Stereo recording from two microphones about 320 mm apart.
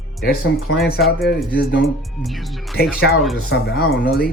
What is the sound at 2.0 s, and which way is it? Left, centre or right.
Speech, centre.